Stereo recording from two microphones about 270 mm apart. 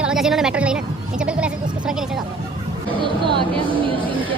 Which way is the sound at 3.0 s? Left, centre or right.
Centre.